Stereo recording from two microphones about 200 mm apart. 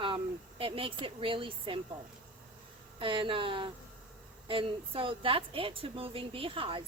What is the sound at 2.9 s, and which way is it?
Speech, 25° right (ahead or behind).